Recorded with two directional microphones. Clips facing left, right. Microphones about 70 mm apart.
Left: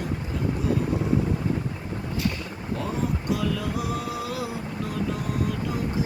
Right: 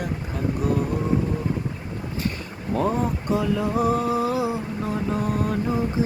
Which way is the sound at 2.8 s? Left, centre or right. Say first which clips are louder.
Right 6 dB; right.